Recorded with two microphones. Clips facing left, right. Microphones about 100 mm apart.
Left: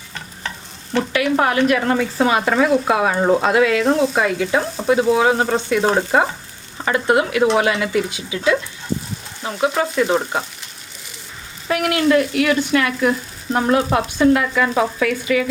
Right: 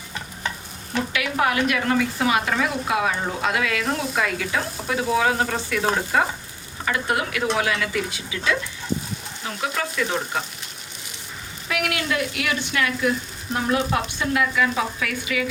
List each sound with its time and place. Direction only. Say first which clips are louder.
1.1 s speech: left 5 dB; 35° left (ahead or behind)
3.4 s sizzle: left 8 dB; 30° left (ahead or behind)
9.4 s speech: left 8 dB; 30° left (ahead or behind)
11.7 s speech: left 9 dB; 45° left (ahead or behind)